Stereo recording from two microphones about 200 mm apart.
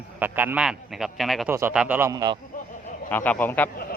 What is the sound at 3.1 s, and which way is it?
Speech, 10° left (ahead or behind).